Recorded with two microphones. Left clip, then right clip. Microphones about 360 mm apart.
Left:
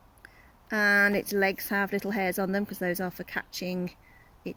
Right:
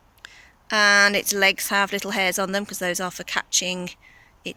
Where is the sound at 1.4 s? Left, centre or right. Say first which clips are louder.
Right 9 dB; right.